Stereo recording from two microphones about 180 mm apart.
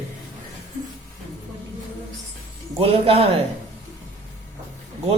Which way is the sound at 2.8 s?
35° right (ahead or behind).